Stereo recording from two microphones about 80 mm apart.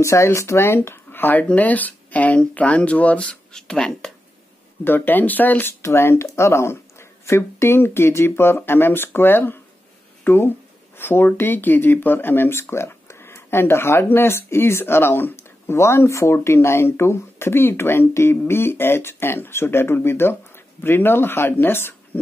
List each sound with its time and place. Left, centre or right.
0.0 s speech: left; by 4.1 s centre
4.8 s speech: left